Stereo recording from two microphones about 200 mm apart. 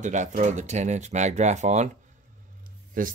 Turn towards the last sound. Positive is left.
turn(degrees=-45)  # may be behind; listen again after turning